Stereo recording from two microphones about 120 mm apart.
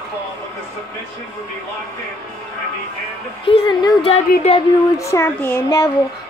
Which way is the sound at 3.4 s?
50° left (ahead or behind).